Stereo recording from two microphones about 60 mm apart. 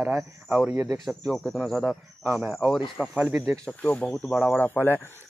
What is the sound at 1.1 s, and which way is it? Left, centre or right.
Speech, centre.